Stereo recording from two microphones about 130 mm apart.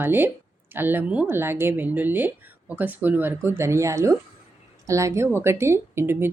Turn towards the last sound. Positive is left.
turn(degrees=-15)  # may be behind; listen again after turning